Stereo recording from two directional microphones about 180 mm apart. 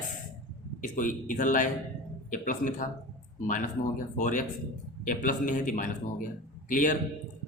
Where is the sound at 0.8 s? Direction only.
45° left (ahead or behind).